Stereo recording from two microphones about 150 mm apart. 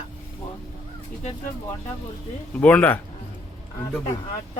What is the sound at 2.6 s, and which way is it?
Speech, 10° left (ahead or behind).